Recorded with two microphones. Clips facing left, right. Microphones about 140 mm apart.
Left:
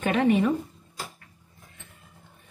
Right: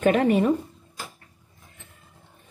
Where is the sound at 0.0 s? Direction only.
45° right (ahead or behind).